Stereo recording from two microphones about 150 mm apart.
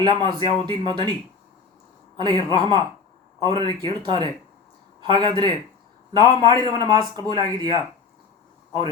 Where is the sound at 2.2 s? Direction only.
30° right (ahead or behind).